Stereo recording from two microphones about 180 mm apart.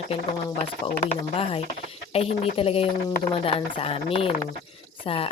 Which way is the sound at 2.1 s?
35° left (ahead or behind).